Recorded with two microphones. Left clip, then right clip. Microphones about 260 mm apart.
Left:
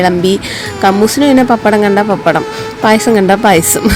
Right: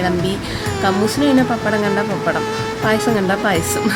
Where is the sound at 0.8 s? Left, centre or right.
Left.